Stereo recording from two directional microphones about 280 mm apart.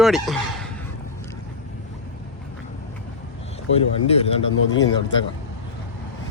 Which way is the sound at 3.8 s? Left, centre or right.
Left.